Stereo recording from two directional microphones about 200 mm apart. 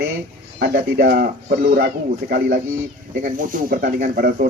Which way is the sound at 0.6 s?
45° right (ahead or behind).